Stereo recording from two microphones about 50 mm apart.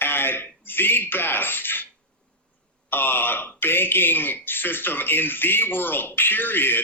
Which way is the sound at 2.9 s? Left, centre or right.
Left.